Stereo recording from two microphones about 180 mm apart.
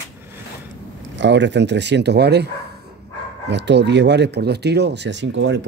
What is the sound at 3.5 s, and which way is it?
Speech, 75° right (ahead or behind).